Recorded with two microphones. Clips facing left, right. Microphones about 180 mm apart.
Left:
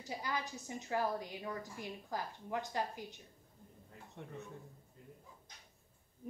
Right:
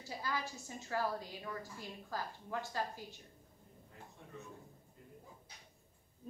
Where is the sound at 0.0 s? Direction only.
20° left (ahead or behind).